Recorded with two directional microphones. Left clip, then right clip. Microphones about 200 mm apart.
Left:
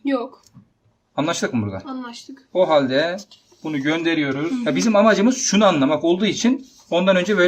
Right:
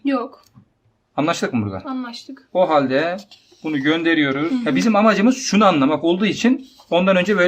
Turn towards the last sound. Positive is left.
turn(degrees=-15)  # may be behind; listen again after turning